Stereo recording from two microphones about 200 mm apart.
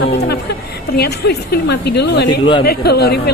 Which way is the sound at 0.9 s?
55° left (ahead or behind).